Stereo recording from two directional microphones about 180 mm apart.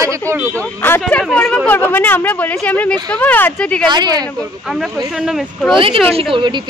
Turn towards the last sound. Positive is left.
turn(degrees=-25)  # may be behind; listen again after turning